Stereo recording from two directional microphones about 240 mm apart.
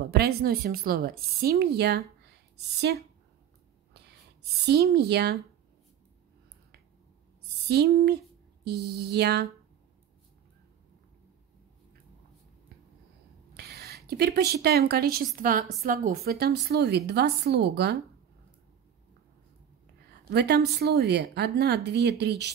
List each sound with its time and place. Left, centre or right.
0.0 s a woman's voice: right
3.9 s a sound: right
4.9 s a woman's voice: right
7.6 s a woman's voice: right
13.6 s a woman's voice: right
20.2 s a woman's voice: right